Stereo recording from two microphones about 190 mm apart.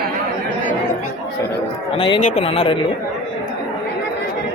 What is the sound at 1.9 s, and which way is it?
Speech, 30° left (ahead or behind).